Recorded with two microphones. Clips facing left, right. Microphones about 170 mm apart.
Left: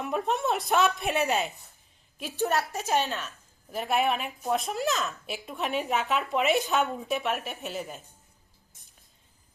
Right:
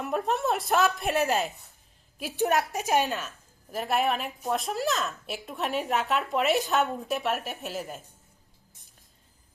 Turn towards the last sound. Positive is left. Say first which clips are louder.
# right 1 dB
turn(degrees=0)  # may be behind; listen again after turning